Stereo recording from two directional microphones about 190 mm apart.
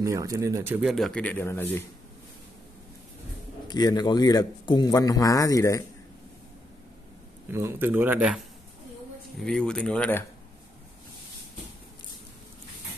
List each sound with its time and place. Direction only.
0.0 s speech: 15° right (ahead or behind)
0.8 s speech: centre (ahead or behind)
3.6 s a man's voice: 20° left (ahead or behind)
7.5 s speech: 10° right (ahead or behind)
9.4 s speech: 5° left (ahead or behind)